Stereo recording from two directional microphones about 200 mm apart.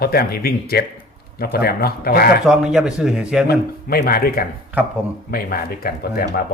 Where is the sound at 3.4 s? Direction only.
45° left (ahead or behind).